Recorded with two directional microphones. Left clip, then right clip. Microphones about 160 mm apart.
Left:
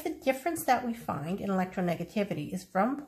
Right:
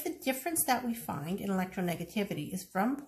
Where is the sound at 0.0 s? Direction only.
35° left (ahead or behind).